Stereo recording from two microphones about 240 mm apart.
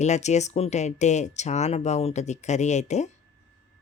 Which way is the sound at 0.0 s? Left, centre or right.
Left.